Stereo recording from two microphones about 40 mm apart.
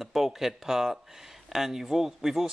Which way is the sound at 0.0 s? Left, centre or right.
Centre.